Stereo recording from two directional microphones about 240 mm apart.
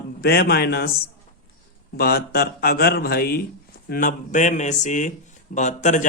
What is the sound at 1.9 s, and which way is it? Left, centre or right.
Speech, left.